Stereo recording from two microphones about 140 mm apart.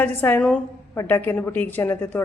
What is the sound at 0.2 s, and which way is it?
Speech, 10° left (ahead or behind).